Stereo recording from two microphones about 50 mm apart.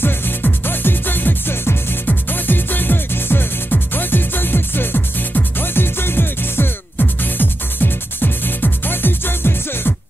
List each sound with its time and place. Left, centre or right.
0.0 s music: left
2.0 s music: left